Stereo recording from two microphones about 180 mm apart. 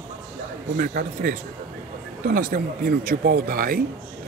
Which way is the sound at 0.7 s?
50° right (ahead or behind).